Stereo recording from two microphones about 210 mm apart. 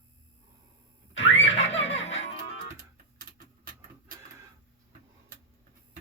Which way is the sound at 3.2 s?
40° right (ahead or behind).